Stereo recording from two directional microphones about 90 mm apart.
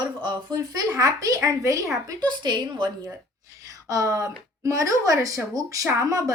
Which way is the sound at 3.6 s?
40° right (ahead or behind).